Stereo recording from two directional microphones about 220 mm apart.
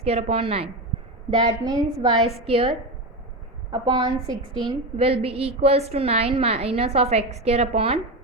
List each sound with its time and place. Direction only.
0.0 s a woman's voice: 25° right (ahead or behind)